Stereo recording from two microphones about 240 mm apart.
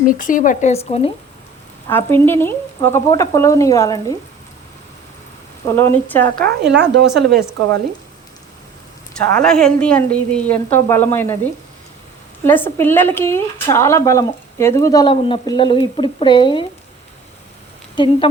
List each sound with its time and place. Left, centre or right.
0.0 s speech: left
1.9 s speech: centre
5.6 s speech: centre
6.4 s speech: right
9.1 s a woman's voice: centre
12.4 s speech: centre
17.9 s speech: left